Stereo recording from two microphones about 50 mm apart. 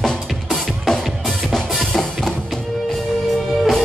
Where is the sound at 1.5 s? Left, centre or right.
Centre.